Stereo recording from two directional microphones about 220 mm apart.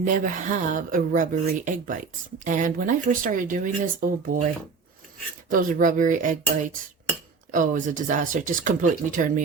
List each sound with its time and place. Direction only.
0.0 s speech: 35° right (ahead or behind)
5.5 s speech: 40° right (ahead or behind)
7.5 s speech: 35° right (ahead or behind)